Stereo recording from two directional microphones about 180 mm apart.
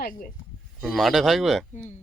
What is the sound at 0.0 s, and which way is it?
Speech, 50° left (ahead or behind).